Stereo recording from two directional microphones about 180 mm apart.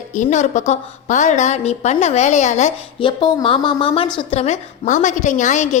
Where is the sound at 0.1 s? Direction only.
45° left (ahead or behind).